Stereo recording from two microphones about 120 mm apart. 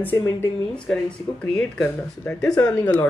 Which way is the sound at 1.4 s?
10° left (ahead or behind).